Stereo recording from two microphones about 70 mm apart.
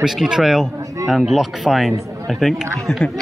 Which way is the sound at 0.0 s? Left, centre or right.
Centre.